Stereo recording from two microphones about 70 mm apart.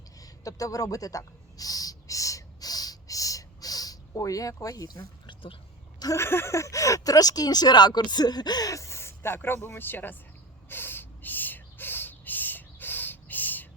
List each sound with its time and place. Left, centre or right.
0.2 s owl: left
6.1 s speech: left
8.7 s speech: left
10.7 s a sound: left